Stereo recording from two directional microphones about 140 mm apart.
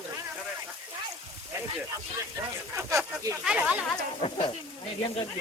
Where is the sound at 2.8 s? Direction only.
20° right (ahead or behind).